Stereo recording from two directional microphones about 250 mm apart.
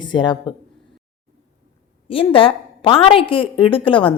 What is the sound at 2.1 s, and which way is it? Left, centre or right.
A woman's voice, left.